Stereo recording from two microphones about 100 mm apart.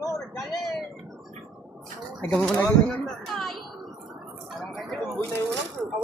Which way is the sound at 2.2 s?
Centre (ahead or behind).